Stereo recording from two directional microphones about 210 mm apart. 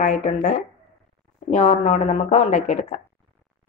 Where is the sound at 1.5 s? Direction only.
35° left (ahead or behind).